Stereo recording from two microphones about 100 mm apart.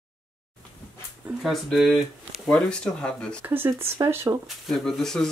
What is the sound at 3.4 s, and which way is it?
Speech, 20° right (ahead or behind).